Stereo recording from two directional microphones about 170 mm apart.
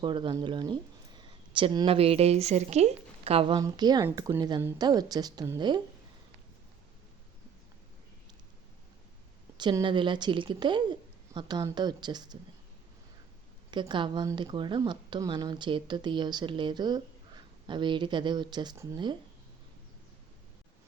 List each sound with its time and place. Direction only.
0.0 s speech: 30° right (ahead or behind)
9.6 s speech: 25° right (ahead or behind)
13.7 s speech: 25° right (ahead or behind)